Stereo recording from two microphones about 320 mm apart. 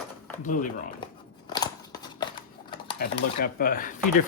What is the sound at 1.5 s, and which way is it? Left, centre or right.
Scissors, centre.